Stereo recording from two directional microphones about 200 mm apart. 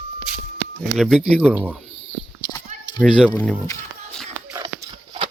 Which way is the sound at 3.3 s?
10° left (ahead or behind).